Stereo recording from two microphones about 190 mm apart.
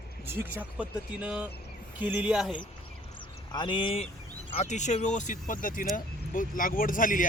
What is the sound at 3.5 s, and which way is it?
Speech, 25° left (ahead or behind).